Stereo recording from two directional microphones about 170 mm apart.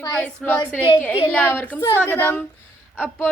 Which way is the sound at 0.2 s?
10° left (ahead or behind).